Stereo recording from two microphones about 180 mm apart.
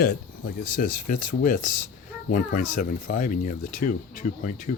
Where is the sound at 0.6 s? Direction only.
50° left (ahead or behind).